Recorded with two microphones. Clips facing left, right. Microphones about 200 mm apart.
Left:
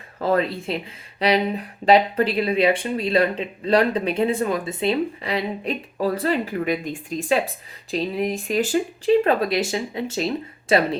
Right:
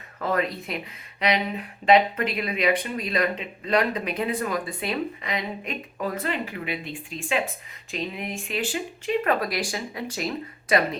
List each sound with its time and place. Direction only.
0.2 s speech: 30° left (ahead or behind)
9.2 s speech: 25° left (ahead or behind)